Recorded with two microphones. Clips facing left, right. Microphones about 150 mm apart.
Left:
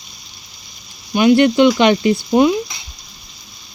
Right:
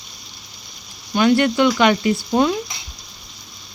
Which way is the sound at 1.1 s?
15° left (ahead or behind).